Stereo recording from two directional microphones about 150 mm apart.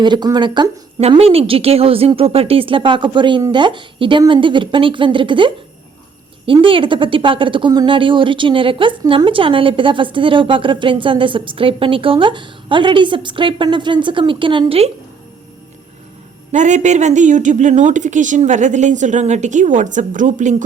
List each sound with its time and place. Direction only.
0.0 s speech: 30° right (ahead or behind)
1.0 s speech: 40° right (ahead or behind)
16.5 s speech: 55° right (ahead or behind)